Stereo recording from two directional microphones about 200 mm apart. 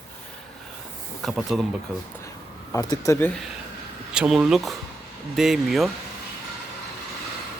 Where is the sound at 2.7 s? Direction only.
20° left (ahead or behind).